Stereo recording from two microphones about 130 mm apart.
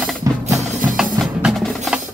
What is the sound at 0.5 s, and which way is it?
Music, 5° right (ahead or behind).